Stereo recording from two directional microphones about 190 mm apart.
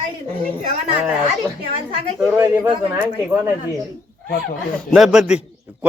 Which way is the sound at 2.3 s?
10° right (ahead or behind).